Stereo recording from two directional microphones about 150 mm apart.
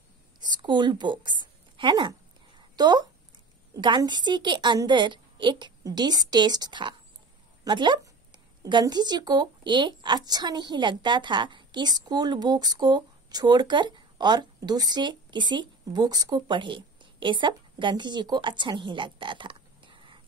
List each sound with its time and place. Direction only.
0.4 s a woman's voice: 30° right (ahead or behind)